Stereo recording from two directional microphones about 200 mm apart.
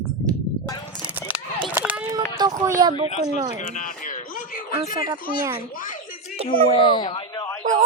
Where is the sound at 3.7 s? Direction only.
40° left (ahead or behind).